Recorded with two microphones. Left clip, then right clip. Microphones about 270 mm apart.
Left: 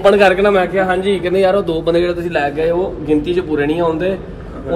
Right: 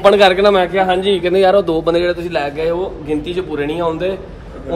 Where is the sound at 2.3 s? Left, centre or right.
Centre.